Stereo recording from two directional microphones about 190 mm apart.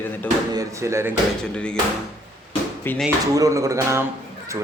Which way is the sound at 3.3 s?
15° right (ahead or behind).